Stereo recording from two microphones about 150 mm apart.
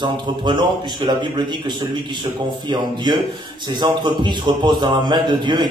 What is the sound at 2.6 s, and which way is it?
A man's voice, 30° right (ahead or behind).